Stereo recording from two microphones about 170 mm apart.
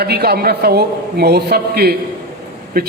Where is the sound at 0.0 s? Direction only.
65° right (ahead or behind).